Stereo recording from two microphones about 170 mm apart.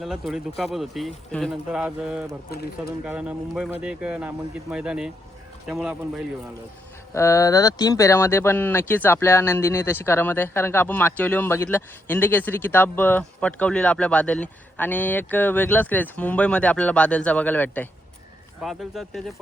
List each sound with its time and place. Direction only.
0.0 s speech: centre (ahead or behind)
2.5 s speech: 65° left (ahead or behind)
3.0 s speech: 5° right (ahead or behind)
7.1 s speech: 15° left (ahead or behind)
18.6 s speech: centre (ahead or behind)